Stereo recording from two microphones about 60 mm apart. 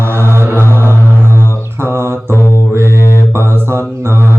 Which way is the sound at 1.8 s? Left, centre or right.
Right.